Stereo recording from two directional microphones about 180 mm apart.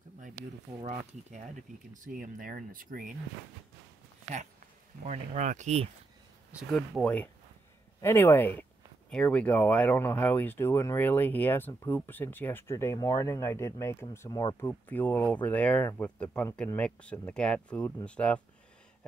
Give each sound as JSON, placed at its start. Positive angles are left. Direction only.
{"t": 0.8, "sound": "speech", "side_deg": -40}
{"t": 5.0, "sound": "speech", "side_deg": -40}
{"t": 7.0, "sound": "speech", "side_deg": 5}
{"t": 14.7, "sound": "speech", "side_deg": 10}